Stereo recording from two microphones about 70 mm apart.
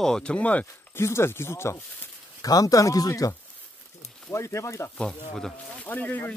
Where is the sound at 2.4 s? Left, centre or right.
Left.